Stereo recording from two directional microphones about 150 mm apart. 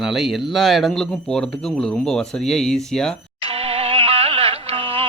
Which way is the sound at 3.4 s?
40° right (ahead or behind).